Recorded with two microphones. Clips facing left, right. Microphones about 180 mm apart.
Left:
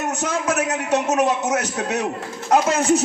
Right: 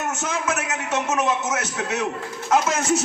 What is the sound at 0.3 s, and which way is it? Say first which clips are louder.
A man's voice: left 6 dB; 35° left (ahead or behind).